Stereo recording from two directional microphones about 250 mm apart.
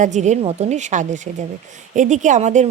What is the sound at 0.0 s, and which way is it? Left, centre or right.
Speech, right.